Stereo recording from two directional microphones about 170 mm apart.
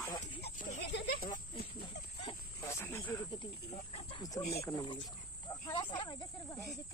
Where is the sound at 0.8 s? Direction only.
90° left.